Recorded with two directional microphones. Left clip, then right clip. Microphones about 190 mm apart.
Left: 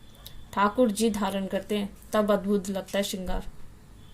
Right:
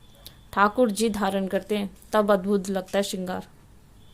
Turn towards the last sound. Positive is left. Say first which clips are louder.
# right 3 dB
turn(degrees=-40)  # may be behind; listen again after turning